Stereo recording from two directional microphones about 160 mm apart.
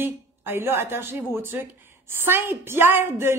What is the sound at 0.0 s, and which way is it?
A woman's voice, 15° right (ahead or behind).